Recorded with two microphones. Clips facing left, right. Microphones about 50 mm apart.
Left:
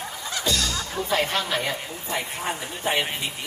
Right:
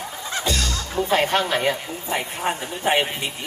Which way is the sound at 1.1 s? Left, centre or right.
Right.